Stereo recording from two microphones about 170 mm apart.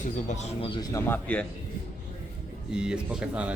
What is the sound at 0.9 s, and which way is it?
Speech, 10° left (ahead or behind).